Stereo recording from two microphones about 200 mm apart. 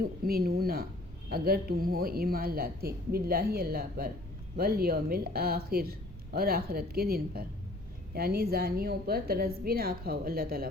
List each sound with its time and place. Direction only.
0.0 s a woman's voice: 50° right (ahead or behind)